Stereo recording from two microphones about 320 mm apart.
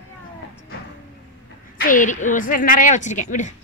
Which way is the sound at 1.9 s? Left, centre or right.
Left.